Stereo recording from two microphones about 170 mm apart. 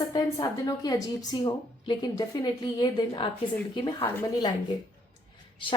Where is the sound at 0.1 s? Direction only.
25° left (ahead or behind).